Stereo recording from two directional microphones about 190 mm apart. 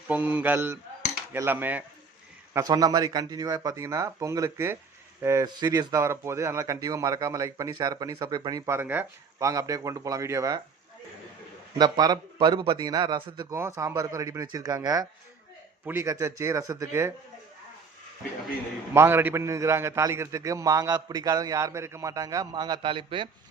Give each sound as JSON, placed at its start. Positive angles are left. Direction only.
{"t": 0.1, "sound": "a man's voice", "side_deg": -10}
{"t": 11.8, "sound": "a man's voice", "side_deg": -20}
{"t": 18.9, "sound": "speech", "side_deg": -10}